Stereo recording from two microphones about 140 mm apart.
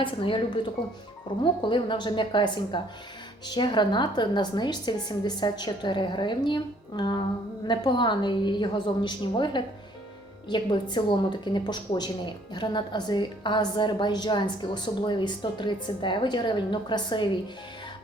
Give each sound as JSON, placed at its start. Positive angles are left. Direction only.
{"t": 0.0, "sound": "a woman's voice", "side_deg": 35}